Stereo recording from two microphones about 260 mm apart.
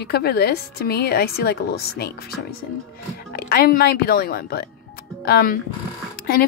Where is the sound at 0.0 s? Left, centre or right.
Left.